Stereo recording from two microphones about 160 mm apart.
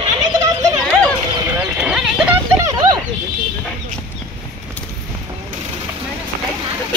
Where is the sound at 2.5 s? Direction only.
20° right (ahead or behind).